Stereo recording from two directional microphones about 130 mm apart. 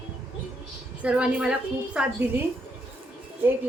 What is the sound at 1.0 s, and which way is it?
A woman's voice, 10° right (ahead or behind).